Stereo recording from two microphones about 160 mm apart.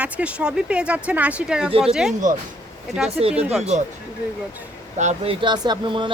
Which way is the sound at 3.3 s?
10° right (ahead or behind).